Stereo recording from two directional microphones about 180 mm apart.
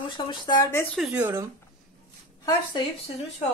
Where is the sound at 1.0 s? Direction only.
5° right (ahead or behind).